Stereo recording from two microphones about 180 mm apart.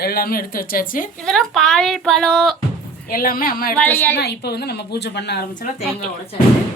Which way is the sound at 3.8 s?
10° left (ahead or behind).